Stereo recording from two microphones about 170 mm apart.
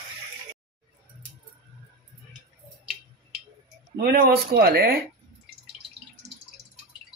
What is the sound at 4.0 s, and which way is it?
Speech, 60° right (ahead or behind).